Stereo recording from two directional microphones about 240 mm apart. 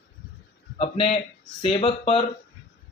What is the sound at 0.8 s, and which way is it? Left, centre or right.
Speech, left.